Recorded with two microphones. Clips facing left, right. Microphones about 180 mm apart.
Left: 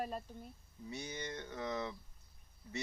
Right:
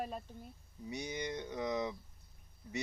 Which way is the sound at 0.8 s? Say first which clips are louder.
Right 4 dB; 15° right (ahead or behind).